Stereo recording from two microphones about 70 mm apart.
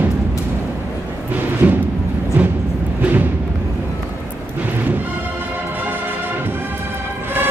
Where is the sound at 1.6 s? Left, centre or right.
Right.